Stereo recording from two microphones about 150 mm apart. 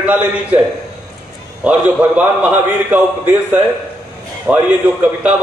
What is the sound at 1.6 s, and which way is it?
Speech, 10° right (ahead or behind).